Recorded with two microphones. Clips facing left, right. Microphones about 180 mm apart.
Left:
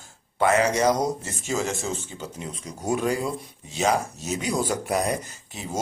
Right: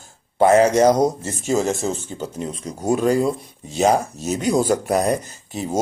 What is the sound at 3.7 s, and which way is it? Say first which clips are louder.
Speech: right 6 dB; 45° right (ahead or behind).